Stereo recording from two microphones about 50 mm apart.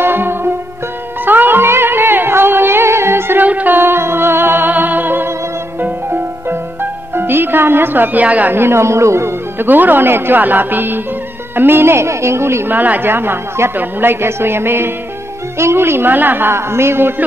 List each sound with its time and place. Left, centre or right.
0.0 s music: right
3.4 s music: right
8.5 s a woman's voice: right
9.6 s a woman's voice: right
12.6 s speech: right
13.1 s a man's voice: right
16.5 s a woman's voice: right